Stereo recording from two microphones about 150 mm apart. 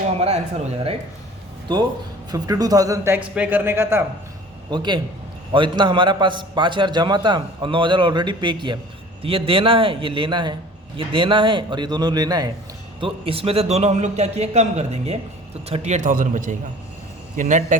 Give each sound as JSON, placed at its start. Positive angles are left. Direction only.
{"t": 0.2, "sound": "a man's voice", "side_deg": -45}
{"t": 1.7, "sound": "a man's voice", "side_deg": -35}
{"t": 4.7, "sound": "a man's voice", "side_deg": -30}
{"t": 13.0, "sound": "a man's voice", "side_deg": -35}